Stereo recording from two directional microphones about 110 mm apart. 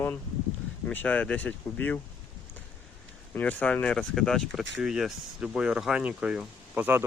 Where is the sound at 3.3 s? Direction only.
15° left (ahead or behind); by 7.0 s 15° right (ahead or behind).